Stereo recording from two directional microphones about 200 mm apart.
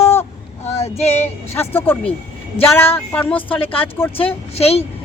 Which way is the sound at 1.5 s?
10° left (ahead or behind).